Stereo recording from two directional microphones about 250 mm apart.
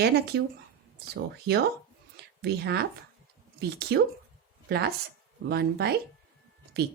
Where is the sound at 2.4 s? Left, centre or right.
Right.